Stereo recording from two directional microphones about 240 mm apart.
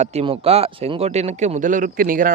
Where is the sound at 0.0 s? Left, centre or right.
Right.